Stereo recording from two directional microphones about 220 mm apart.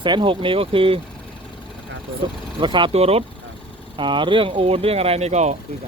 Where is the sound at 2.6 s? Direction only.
20° right (ahead or behind).